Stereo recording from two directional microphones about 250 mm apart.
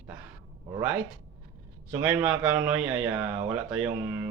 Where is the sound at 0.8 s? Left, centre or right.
Centre.